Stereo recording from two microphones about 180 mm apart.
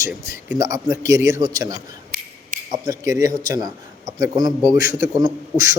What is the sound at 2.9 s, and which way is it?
A man's voice, 20° right (ahead or behind).